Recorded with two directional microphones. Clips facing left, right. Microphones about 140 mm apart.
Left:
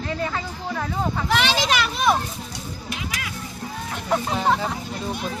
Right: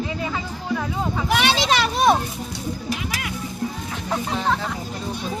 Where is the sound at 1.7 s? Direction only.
35° right (ahead or behind).